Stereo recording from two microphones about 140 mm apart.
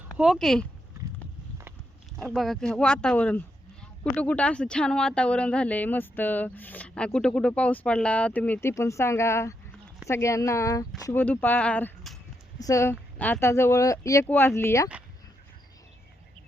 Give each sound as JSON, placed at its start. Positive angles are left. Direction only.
{"t": 0.2, "sound": "speech", "side_deg": 0}
{"t": 2.1, "sound": "speech", "side_deg": 0}
{"t": 8.7, "sound": "speech", "side_deg": 20}
{"t": 11.2, "sound": "speech", "side_deg": 15}
{"t": 12.5, "sound": "speech", "side_deg": 25}